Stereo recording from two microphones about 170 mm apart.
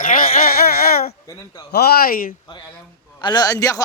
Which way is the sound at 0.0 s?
55° left (ahead or behind).